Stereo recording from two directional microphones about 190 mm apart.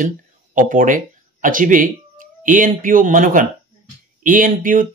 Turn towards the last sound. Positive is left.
turn(degrees=-45)  # may be behind; listen again after turning